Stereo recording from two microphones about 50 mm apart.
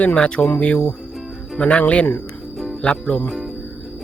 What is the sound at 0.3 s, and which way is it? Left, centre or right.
Speech, left.